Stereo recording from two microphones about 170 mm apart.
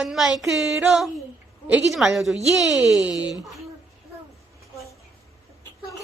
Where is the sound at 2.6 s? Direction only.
20° left (ahead or behind).